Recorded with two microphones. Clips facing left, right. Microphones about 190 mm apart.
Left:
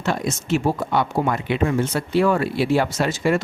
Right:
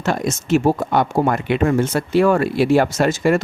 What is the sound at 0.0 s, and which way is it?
Speech, 45° right (ahead or behind).